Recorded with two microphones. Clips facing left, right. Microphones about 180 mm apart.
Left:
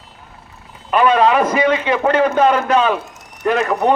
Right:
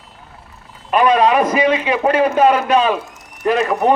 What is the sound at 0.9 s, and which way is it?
A man's voice, 15° right (ahead or behind).